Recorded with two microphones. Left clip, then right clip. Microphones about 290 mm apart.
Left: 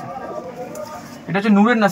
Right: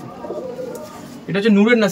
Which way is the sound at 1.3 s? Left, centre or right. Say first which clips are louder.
Right 2 dB; centre.